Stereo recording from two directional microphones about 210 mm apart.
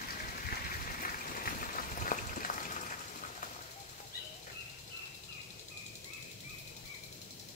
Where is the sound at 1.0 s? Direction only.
40° left (ahead or behind).